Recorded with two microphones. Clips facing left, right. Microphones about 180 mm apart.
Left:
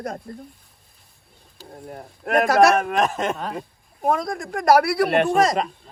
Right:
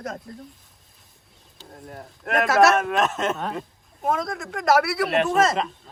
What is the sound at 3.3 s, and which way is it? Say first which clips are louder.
Speech: even; centre (ahead or behind).